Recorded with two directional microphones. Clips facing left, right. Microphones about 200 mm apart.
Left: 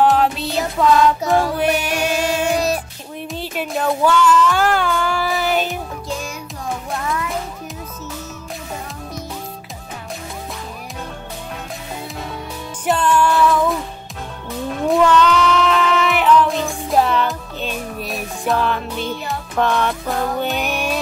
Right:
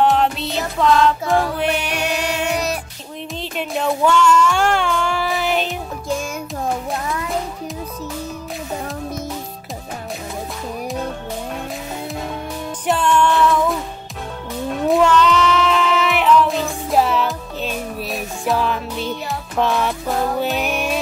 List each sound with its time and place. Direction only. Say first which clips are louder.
0.0 s music: left 1 dB; centre (ahead or behind)
1.9 s music: left 2 dB; 45° left (ahead or behind)
3.3 s music: even; 5° left (ahead or behind)
12.8 s music: even; centre (ahead or behind)